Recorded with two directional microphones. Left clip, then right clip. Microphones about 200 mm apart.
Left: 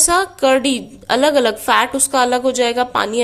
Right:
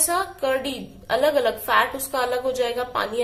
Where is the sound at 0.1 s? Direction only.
40° left (ahead or behind).